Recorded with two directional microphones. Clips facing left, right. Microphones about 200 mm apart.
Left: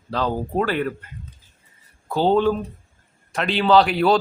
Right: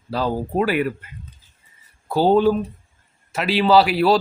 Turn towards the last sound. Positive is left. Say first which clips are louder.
# right 1 dB
turn(degrees=-5)  # may be behind; listen again after turning